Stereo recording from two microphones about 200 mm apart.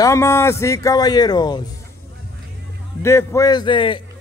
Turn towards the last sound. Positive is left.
turn(degrees=25)  # may be behind; listen again after turning